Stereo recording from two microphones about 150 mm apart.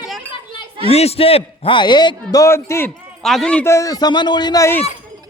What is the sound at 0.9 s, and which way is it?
A man's voice, 40° left (ahead or behind).